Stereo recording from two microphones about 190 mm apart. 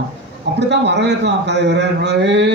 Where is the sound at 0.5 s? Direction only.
65° right (ahead or behind).